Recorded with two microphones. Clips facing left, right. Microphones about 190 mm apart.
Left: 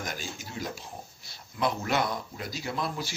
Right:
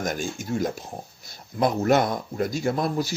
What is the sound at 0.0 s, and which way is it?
Speech, 50° right (ahead or behind).